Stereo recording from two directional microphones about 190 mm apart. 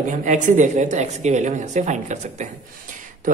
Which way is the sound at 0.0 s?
40° right (ahead or behind).